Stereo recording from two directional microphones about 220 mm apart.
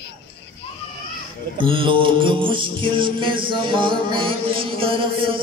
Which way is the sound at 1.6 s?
25° right (ahead or behind).